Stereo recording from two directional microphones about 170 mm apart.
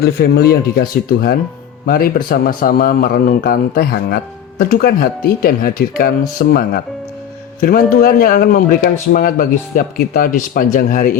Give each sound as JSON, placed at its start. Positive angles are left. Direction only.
{"t": 0.0, "sound": "speech", "side_deg": 65}